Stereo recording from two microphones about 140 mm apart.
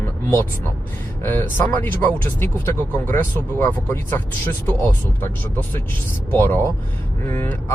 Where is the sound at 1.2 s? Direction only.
15° left (ahead or behind).